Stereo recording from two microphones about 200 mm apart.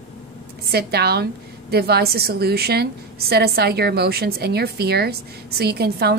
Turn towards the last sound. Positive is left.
turn(degrees=-55)  # may be behind; listen again after turning